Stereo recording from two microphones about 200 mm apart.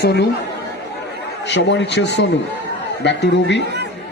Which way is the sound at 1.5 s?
60° left (ahead or behind).